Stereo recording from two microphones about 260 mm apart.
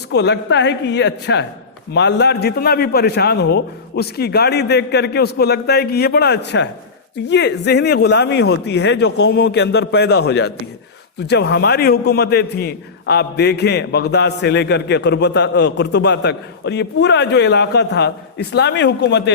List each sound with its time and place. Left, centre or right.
0.1 s a woman's voice: left